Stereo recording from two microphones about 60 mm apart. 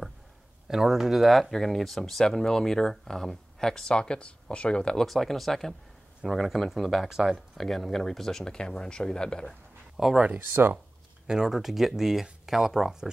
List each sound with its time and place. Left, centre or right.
0.7 s speech: centre
5.0 s speech: centre
7.6 s speech: centre
9.9 s speech: centre
10.2 s speech: right
11.2 s speech: centre